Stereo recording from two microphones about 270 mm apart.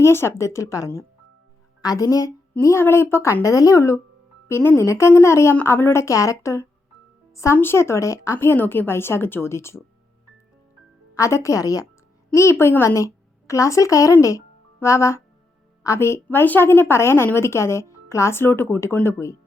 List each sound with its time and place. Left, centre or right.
0.0 s a woman's voice: centre
11.2 s a woman's voice: centre